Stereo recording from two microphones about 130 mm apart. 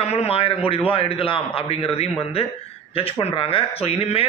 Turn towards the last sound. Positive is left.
turn(degrees=45)  # may be behind; listen again after turning